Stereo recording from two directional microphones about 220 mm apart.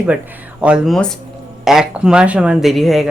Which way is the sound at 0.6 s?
5° right (ahead or behind).